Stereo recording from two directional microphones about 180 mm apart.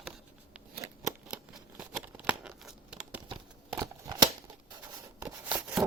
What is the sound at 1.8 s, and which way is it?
Tearing, 5° right (ahead or behind).